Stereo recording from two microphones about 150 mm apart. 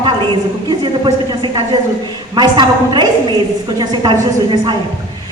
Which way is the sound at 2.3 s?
30° right (ahead or behind).